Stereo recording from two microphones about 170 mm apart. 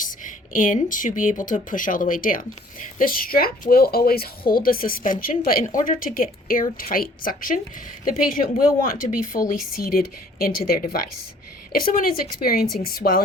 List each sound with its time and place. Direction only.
0.0 s a woman's voice: 55° left (ahead or behind)